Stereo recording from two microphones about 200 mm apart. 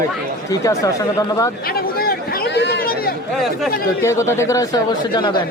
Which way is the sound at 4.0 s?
15° left (ahead or behind).